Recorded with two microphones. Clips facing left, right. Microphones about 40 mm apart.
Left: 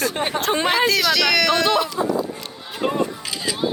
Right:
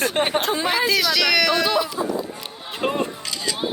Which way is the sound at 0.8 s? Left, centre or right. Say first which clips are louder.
Left 1 dB; centre.